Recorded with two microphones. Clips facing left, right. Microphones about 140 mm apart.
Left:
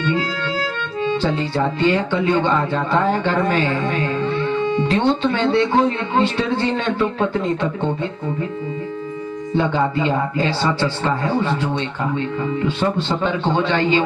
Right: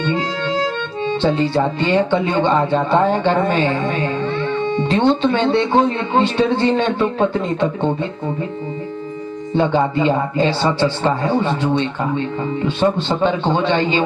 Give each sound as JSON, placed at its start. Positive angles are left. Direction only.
{"t": 0.0, "sound": "speech", "side_deg": -20}
{"t": 9.6, "sound": "speech", "side_deg": -25}